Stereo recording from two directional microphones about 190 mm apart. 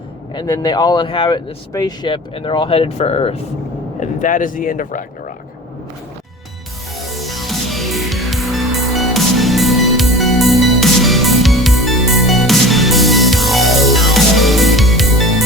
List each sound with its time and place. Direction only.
0.3 s speech: 20° left (ahead or behind)
4.0 s speech: 45° left (ahead or behind)
6.9 s music: centre (ahead or behind)